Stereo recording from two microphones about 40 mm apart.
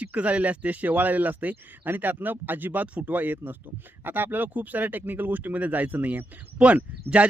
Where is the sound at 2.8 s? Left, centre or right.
Right.